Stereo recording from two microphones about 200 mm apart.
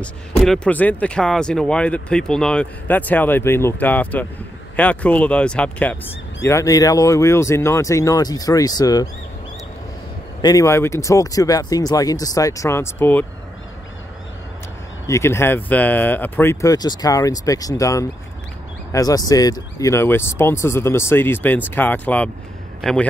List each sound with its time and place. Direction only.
0.0 s speech: 5° left (ahead or behind)
10.4 s speech: 15° left (ahead or behind)
15.0 s a man's voice: 15° left (ahead or behind)